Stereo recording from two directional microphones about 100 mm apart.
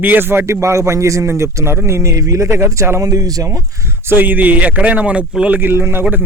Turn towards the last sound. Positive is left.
turn(degrees=-25)  # may be behind; listen again after turning